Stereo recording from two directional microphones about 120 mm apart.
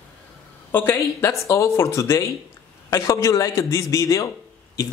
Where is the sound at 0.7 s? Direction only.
20° left (ahead or behind).